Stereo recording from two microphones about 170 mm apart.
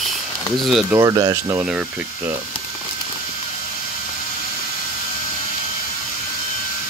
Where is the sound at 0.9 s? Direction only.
20° right (ahead or behind).